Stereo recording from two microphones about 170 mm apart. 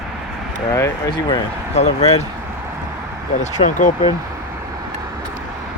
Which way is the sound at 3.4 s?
45° left (ahead or behind).